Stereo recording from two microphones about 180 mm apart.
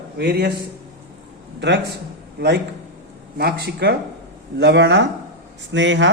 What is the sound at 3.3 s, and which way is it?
A man's voice, 65° right (ahead or behind).